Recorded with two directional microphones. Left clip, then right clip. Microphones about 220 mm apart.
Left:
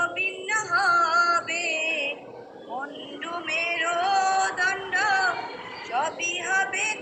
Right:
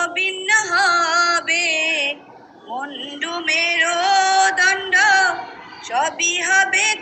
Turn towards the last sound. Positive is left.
turn(degrees=-30)  # may be behind; listen again after turning